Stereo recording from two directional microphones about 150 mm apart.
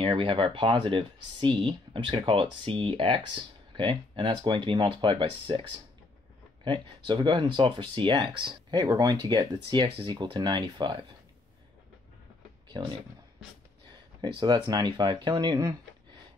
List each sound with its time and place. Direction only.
0.0 s speech: 35° right (ahead or behind)
12.6 s a sound: 30° right (ahead or behind)
14.2 s speech: 30° right (ahead or behind)